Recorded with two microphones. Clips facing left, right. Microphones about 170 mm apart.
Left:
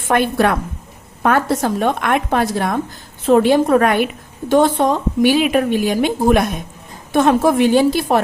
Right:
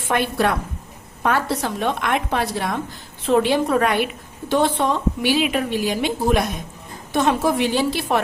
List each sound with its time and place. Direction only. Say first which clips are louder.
0.1 s a woman's voice: left 5 dB; 50° left (ahead or behind)